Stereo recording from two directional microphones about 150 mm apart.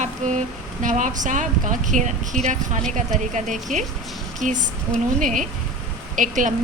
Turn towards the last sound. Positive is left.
turn(degrees=-55)  # may be behind; listen again after turning